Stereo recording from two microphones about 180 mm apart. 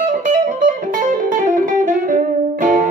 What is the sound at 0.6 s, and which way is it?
Music, 45° right (ahead or behind).